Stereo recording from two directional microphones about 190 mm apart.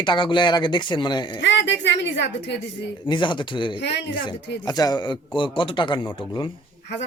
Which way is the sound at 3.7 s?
65° left (ahead or behind).